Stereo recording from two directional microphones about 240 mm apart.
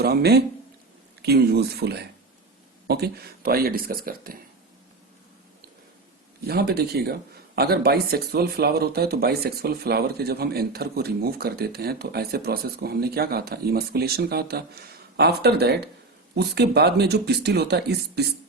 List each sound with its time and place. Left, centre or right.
0.0 s speech: right
6.5 s speech: right